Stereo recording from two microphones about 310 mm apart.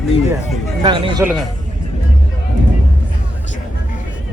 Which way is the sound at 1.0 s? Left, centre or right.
Centre.